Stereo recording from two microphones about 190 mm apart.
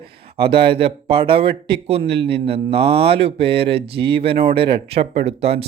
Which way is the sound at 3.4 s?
60° right (ahead or behind).